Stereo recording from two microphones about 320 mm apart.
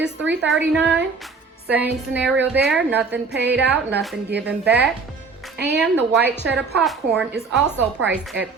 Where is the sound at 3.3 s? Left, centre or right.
Right.